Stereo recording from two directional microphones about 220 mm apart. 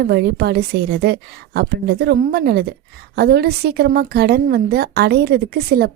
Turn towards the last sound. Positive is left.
turn(degrees=-45)  # may be behind; listen again after turning